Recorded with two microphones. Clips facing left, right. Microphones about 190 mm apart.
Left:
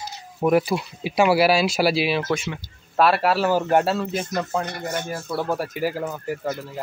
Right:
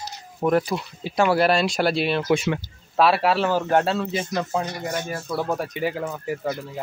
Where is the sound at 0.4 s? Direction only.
10° left (ahead or behind).